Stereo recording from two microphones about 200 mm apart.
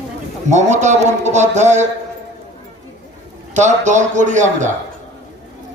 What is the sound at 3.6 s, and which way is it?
A man's voice, 35° right (ahead or behind).